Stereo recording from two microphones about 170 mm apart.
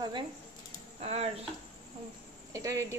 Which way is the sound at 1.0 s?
35° right (ahead or behind).